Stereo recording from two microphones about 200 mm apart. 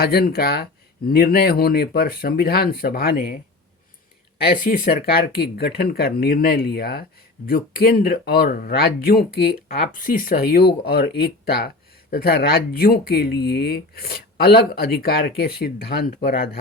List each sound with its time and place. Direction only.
0.0 s speech: 50° left (ahead or behind)
4.4 s speech: 45° left (ahead or behind)